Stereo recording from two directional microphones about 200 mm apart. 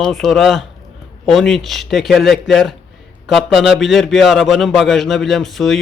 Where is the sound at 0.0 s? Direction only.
Centre (ahead or behind).